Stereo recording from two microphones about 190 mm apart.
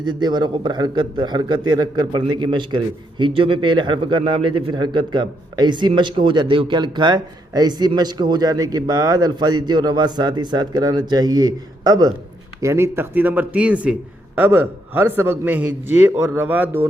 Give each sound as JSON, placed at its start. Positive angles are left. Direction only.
{"t": 0.0, "sound": "a man's voice", "side_deg": -20}